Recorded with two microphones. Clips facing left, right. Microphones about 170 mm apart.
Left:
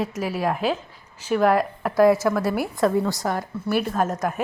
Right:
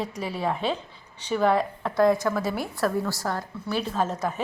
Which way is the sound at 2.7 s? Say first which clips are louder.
Left 5 dB; 20° left (ahead or behind).